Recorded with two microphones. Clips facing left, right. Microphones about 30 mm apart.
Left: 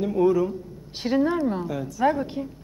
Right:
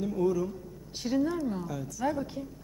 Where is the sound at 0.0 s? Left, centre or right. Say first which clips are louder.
Left 8 dB; left.